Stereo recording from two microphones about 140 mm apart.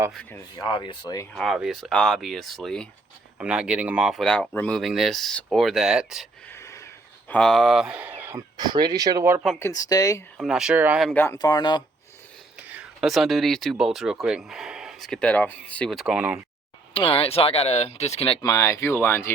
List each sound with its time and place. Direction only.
0.5 s speech: 30° left (ahead or behind)
1.3 s speech: 5° left (ahead or behind)
4.8 s speech: centre (ahead or behind)
6.5 s a sound: 20° left (ahead or behind)
7.3 s speech: 5° left (ahead or behind); by 8.4 s 15° right (ahead or behind)
8.5 s speech: 30° right (ahead or behind)
9.6 s speech: 20° left (ahead or behind)
10.3 s speech: centre (ahead or behind)
11.1 s speech: 15° left (ahead or behind)
11.3 s speech: 30° left (ahead or behind)
12.5 s speech: 10° right (ahead or behind)
16.9 s speech: 40° left (ahead or behind)
18.4 s speech: 20° left (ahead or behind)